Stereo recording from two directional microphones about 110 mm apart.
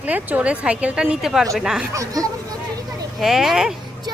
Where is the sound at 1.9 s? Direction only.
30° right (ahead or behind).